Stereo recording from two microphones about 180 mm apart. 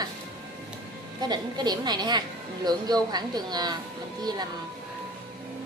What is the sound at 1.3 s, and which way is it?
A woman's voice, 25° right (ahead or behind).